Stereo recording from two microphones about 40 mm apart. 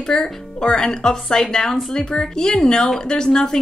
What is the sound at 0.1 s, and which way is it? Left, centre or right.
A woman's voice, centre.